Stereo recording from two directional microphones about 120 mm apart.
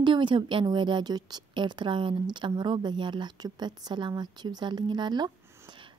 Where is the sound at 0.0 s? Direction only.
40° right (ahead or behind).